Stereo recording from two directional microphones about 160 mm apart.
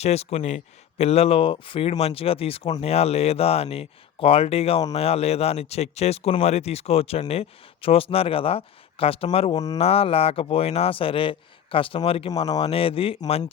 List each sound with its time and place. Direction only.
0.0 s speech: 40° left (ahead or behind)